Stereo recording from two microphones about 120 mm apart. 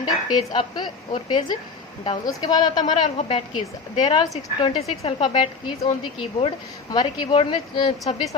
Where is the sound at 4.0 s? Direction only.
35° left (ahead or behind).